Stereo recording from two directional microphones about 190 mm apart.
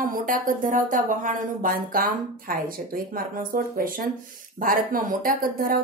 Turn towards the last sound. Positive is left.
turn(degrees=-45)  # may be behind; listen again after turning